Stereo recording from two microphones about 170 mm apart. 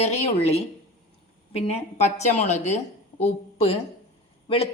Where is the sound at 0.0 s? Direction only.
40° left (ahead or behind).